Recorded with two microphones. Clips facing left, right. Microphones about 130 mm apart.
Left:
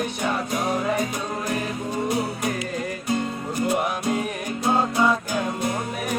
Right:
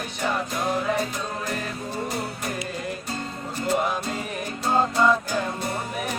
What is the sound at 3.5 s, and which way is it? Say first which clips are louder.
Music: even; 15° left (ahead or behind).